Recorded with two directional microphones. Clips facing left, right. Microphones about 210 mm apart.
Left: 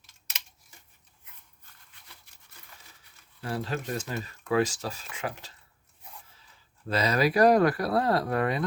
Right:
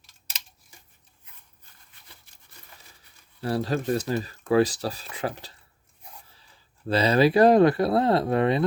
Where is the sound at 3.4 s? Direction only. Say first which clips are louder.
Right 6 dB; 35° right (ahead or behind).